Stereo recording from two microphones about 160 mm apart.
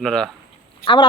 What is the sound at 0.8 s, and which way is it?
Speech, 30° left (ahead or behind).